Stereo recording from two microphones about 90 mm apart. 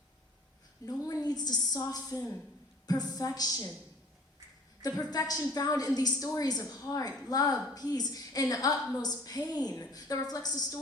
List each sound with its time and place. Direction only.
0.9 s a woman's voice: 45° left (ahead or behind)
5.1 s a woman's voice: 45° left (ahead or behind)